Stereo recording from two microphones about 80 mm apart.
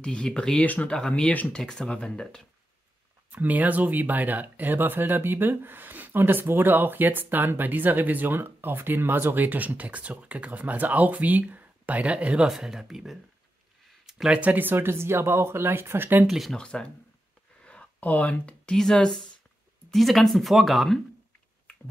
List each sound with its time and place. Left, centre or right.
0.0 s speech: centre
3.3 s speech: right
16.3 s speech: centre
16.5 s speech: centre